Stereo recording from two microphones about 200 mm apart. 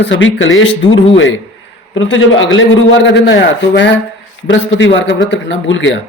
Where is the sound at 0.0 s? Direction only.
65° left (ahead or behind).